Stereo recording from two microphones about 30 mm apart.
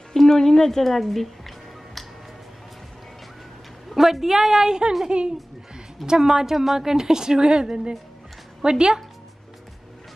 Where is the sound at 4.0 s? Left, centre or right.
Centre.